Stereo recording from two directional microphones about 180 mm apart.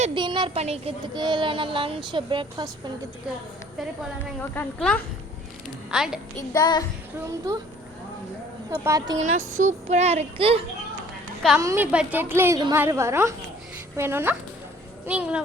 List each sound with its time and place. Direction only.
0.0 s child singing: 25° right (ahead or behind)
4.4 s a woman's voice: 5° left (ahead or behind)
5.9 s a woman's voice: 5° right (ahead or behind)
6.5 s child singing: 20° left (ahead or behind)
8.7 s child singing: 20° right (ahead or behind)
9.2 s speech: 45° right (ahead or behind)
11.6 s a woman's voice: 15° right (ahead or behind)